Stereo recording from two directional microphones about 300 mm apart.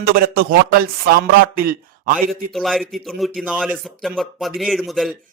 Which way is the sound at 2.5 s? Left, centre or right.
Centre.